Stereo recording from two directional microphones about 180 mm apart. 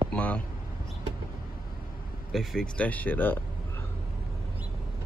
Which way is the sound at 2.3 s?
Centre (ahead or behind).